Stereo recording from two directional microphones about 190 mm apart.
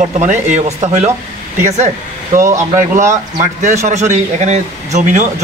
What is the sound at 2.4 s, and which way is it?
Speech, 15° right (ahead or behind).